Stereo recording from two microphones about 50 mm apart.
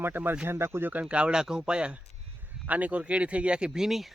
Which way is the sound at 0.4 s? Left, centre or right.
Right.